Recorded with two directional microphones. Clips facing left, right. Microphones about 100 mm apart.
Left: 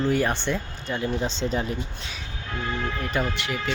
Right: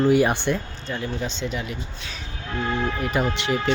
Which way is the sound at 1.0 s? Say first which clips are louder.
Left 3 dB; 30° left (ahead or behind).